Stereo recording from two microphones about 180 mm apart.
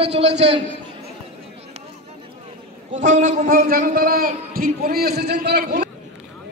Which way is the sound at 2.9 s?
45° right (ahead or behind).